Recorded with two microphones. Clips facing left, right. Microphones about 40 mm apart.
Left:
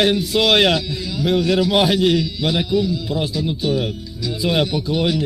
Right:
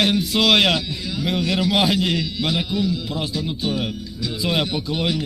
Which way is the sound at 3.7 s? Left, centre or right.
Centre.